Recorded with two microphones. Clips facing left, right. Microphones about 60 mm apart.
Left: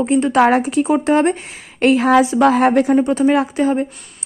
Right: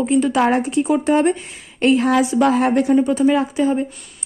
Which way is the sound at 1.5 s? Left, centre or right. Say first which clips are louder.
Left 2 dB; left.